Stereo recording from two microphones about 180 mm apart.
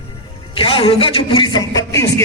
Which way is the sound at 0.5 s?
30° left (ahead or behind).